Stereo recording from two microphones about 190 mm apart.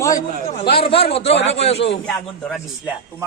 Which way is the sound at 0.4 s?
30° left (ahead or behind).